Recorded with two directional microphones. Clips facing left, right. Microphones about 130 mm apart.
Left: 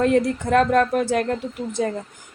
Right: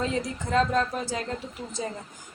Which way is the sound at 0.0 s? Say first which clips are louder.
Left 10 dB; 60° left (ahead or behind).